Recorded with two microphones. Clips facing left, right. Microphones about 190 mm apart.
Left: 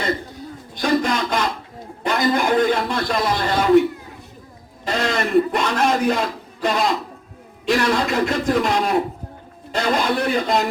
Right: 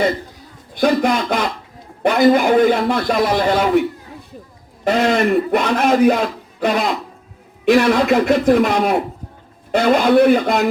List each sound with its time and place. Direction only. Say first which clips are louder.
0.7 s a man's voice: right 4 dB; 55° right (ahead or behind)
4.9 s a man's voice: right 6 dB; 55° right (ahead or behind)